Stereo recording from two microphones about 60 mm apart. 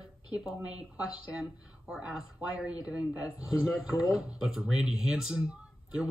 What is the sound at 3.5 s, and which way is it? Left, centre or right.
Speech, centre.